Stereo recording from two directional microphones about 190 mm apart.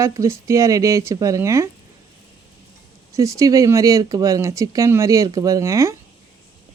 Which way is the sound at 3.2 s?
15° right (ahead or behind).